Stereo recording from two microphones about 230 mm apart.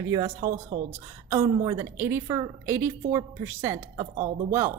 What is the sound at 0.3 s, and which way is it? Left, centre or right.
Speech, right.